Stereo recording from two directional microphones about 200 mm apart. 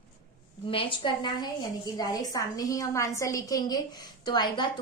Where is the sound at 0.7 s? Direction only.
25° left (ahead or behind).